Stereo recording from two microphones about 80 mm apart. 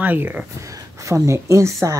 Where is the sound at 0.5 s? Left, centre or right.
Right.